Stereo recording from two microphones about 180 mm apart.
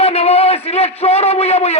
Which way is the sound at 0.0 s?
35° left (ahead or behind).